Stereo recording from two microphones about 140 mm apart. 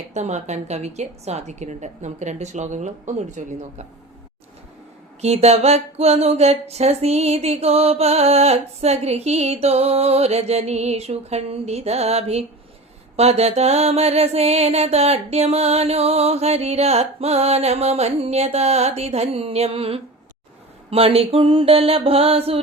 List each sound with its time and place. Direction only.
0.1 s a woman's voice: 55° right (ahead or behind)
5.2 s speech: 50° right (ahead or behind)